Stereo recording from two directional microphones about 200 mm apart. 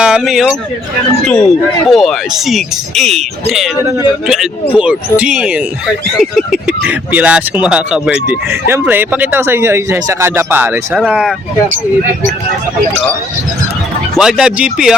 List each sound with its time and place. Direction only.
0.0 s speech: 5° right (ahead or behind)
4.7 s speech: 5° right (ahead or behind)
14.2 s speech: centre (ahead or behind)